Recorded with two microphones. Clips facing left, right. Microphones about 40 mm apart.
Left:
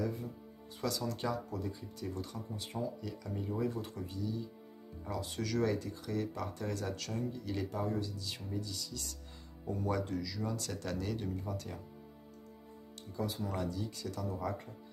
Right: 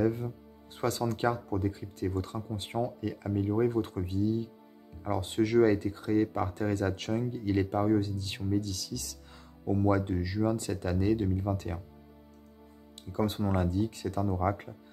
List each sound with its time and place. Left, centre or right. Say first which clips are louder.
0.0 s speech: right 9 dB; right
9.8 s speech: right 6 dB; right
13.1 s speech: right 8 dB; right